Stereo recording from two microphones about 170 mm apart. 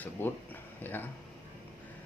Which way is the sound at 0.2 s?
15° left (ahead or behind).